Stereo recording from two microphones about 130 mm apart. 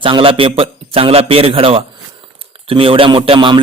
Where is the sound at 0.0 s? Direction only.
45° right (ahead or behind).